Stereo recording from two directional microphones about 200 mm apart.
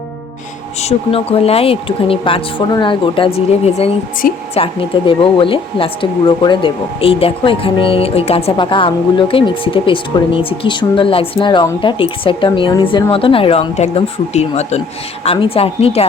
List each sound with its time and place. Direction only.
0.8 s speech: 30° left (ahead or behind)